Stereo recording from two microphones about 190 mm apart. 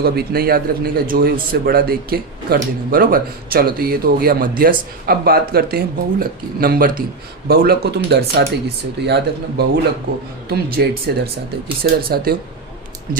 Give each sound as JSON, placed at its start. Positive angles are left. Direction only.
{"t": 0.0, "sound": "speech", "side_deg": -55}